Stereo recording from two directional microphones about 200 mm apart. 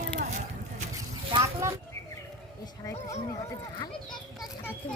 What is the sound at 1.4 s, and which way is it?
Vehicle, 15° right (ahead or behind).